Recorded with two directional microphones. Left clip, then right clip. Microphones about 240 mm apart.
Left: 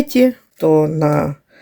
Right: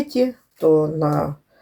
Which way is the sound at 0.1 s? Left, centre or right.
Left.